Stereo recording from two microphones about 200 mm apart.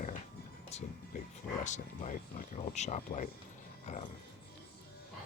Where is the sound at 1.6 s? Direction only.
35° left (ahead or behind).